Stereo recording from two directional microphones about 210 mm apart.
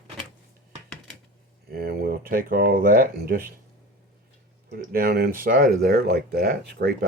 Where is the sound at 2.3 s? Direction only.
45° right (ahead or behind).